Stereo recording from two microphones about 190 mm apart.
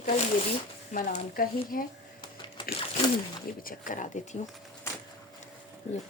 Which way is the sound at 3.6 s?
45° left (ahead or behind).